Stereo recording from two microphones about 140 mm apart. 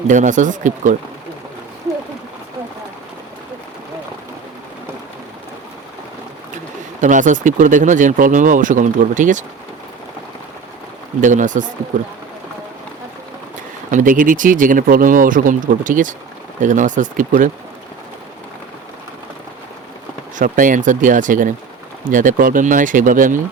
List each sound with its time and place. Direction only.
0.1 s speech: 60° right (ahead or behind)
7.0 s speech: 65° right (ahead or behind)
11.2 s speech: 65° right (ahead or behind)
13.9 s speech: 70° right (ahead or behind)
20.3 s speech: 70° right (ahead or behind)